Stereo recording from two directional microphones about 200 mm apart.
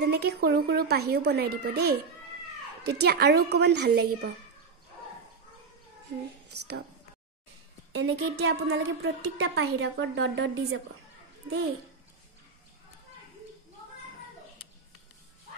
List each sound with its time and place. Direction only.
0.0 s a child's voice: 55° right (ahead or behind)
7.9 s a woman's voice: 60° right (ahead or behind)